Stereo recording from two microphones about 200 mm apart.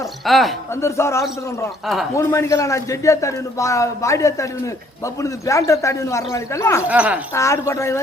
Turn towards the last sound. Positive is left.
turn(degrees=15)  # may be behind; listen again after turning